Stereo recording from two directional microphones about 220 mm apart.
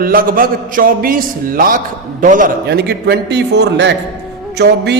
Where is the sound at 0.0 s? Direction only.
40° right (ahead or behind).